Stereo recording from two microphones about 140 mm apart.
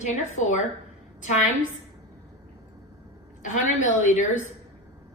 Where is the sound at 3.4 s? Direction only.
60° left (ahead or behind).